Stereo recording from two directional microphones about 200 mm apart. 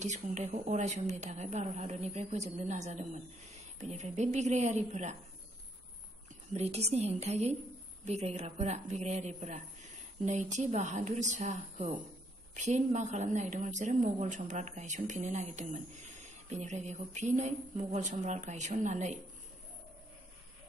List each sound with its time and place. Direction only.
0.0 s a woman's voice: 35° right (ahead or behind)
6.5 s a woman's voice: 30° right (ahead or behind)